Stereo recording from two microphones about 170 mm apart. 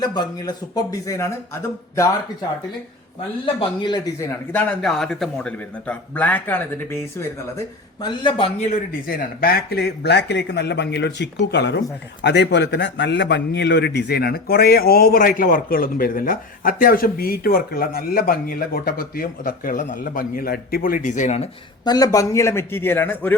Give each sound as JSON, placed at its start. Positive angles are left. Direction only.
{"t": 0.0, "sound": "speech", "side_deg": 25}
{"t": 3.4, "sound": "speech", "side_deg": 30}
{"t": 8.0, "sound": "a man's voice", "side_deg": 30}
{"t": 9.0, "sound": "a man's voice", "side_deg": 60}
{"t": 21.8, "sound": "speech", "side_deg": 20}